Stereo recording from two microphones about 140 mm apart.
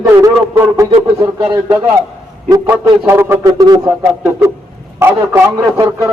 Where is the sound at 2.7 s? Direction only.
15° right (ahead or behind).